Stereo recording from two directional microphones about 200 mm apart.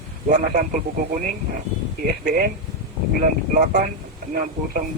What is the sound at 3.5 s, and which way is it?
A man's voice, 40° right (ahead or behind).